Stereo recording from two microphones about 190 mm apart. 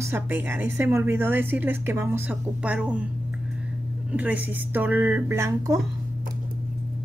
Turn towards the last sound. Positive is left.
turn(degrees=-15)  # may be behind; listen again after turning